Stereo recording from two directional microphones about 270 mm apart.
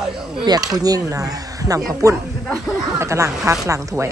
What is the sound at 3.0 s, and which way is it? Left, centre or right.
Speech, centre.